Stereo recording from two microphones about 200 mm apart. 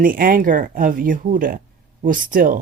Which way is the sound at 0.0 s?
45° right (ahead or behind).